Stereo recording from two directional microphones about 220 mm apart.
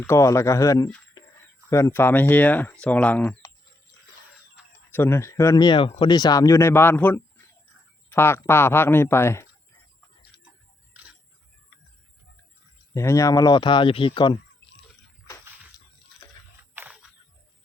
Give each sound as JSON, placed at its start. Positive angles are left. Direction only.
{"t": 0.0, "sound": "speech", "side_deg": 15}
{"t": 4.9, "sound": "speech", "side_deg": 10}
{"t": 12.9, "sound": "speech", "side_deg": 15}
{"t": 16.7, "sound": "a sound", "side_deg": -10}